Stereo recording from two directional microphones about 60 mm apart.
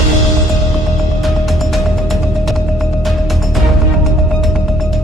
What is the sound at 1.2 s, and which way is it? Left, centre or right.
Music, centre.